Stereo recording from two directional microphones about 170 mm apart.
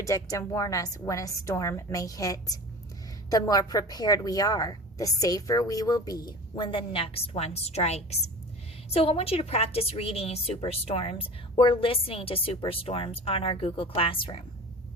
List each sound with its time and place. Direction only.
0.0 s a woman's voice: 20° left (ahead or behind)